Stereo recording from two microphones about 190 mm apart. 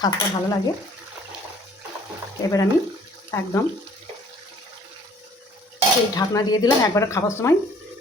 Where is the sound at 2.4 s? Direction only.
15° left (ahead or behind).